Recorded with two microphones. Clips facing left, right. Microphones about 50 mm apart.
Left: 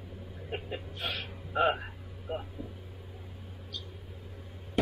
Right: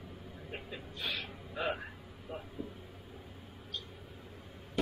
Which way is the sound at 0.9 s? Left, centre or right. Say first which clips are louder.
Even; left.